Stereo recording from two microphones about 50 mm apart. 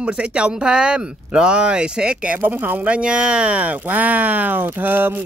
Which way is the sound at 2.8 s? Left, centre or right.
Right.